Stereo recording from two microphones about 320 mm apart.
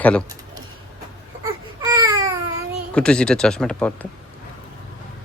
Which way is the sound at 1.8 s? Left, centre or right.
Centre.